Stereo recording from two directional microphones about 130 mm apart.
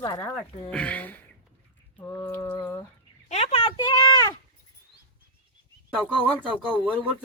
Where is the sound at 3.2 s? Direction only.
50° left (ahead or behind); by 4.3 s 30° left (ahead or behind).